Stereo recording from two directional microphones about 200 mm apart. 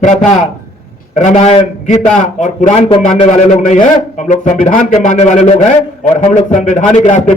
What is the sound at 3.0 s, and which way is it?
A man's voice, 40° left (ahead or behind).